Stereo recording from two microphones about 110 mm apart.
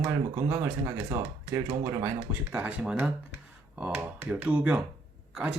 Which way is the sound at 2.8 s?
5° right (ahead or behind).